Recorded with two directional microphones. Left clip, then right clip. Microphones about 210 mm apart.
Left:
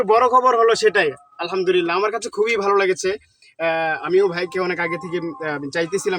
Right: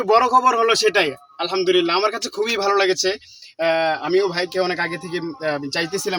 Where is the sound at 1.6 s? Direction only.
15° right (ahead or behind).